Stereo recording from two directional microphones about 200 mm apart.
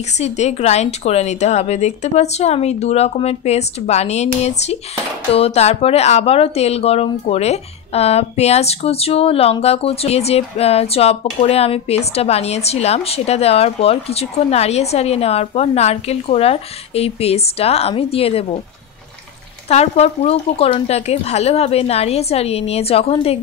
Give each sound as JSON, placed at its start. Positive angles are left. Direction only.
{"t": 0.2, "sound": "speech", "side_deg": 35}
{"t": 19.7, "sound": "speech", "side_deg": 30}